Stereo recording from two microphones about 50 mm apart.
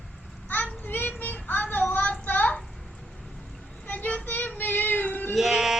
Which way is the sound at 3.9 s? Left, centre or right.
Left.